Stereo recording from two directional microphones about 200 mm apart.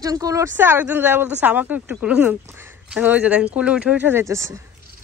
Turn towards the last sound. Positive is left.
turn(degrees=-15)  # may be behind; listen again after turning